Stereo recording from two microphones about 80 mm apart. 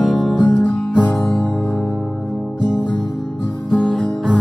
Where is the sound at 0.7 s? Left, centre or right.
Centre.